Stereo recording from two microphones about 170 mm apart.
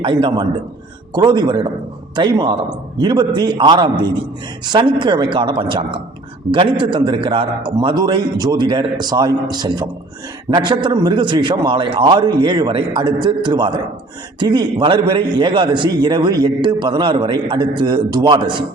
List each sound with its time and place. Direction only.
0.0 s a man's voice: 30° right (ahead or behind)